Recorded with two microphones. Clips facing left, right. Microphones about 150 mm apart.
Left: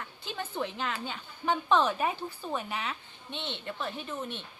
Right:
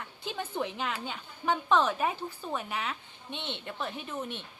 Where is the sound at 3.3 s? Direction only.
15° right (ahead or behind).